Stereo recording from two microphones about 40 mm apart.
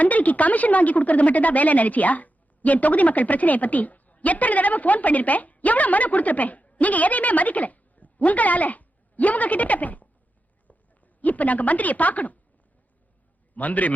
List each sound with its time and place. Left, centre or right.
0.0 s speech: left
11.2 s speech: left
13.6 s speech: left